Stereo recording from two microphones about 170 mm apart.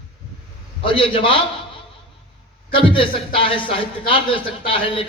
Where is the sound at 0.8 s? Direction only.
30° left (ahead or behind).